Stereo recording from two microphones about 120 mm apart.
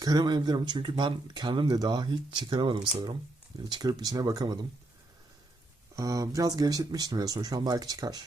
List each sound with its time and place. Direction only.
0.0 s speech: 35° right (ahead or behind)
6.0 s speech: 30° right (ahead or behind)